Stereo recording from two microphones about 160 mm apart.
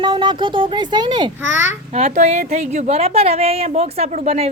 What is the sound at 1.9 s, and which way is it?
A woman's voice, 45° right (ahead or behind).